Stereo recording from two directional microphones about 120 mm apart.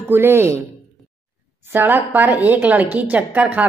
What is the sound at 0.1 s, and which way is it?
Speech, 20° right (ahead or behind).